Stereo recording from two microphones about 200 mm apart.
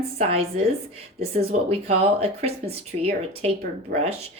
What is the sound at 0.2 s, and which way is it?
A woman's voice, 30° right (ahead or behind).